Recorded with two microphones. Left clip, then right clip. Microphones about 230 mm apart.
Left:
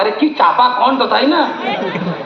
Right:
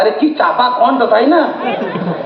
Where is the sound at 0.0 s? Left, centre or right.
Left.